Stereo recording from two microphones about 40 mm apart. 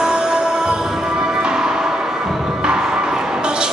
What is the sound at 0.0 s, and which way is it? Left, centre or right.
Music, centre.